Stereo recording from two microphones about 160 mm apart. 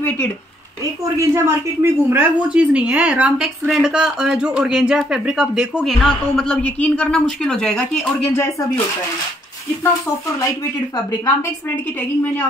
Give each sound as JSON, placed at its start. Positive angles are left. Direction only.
{"t": 1.1, "sound": "a woman's voice", "side_deg": -15}
{"t": 8.4, "sound": "speech", "side_deg": 15}